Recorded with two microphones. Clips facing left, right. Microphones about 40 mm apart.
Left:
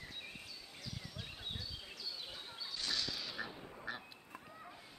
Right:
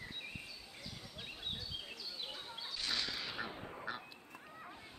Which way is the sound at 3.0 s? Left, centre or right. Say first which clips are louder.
Right 1 dB; right.